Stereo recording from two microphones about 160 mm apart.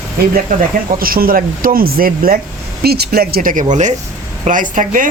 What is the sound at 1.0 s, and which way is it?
Speech, 65° right (ahead or behind).